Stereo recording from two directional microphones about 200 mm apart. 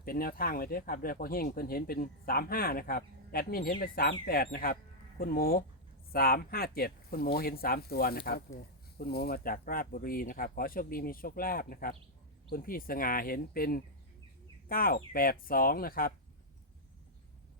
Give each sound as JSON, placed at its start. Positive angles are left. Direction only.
{"t": 0.0, "sound": "speech", "side_deg": 45}